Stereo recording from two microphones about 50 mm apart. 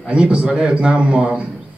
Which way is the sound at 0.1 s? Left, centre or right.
Right.